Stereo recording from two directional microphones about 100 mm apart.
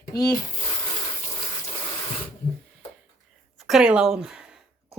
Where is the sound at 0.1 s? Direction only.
40° left (ahead or behind).